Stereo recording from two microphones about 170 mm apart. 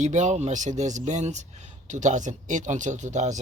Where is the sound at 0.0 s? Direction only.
45° right (ahead or behind).